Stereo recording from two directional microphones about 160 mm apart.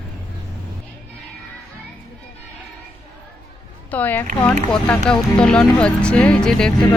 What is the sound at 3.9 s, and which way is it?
Speech, 10° left (ahead or behind).